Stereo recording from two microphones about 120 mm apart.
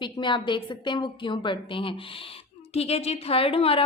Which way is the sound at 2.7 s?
55° left (ahead or behind).